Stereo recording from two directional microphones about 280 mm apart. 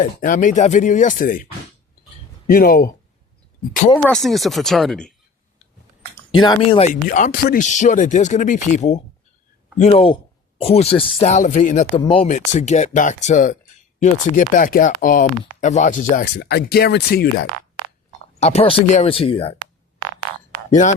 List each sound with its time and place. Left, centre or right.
0.0 s speech: left
2.5 s speech: left
3.9 s speech: centre
6.3 s speech: centre; by 17.4 s left
18.3 s speech: left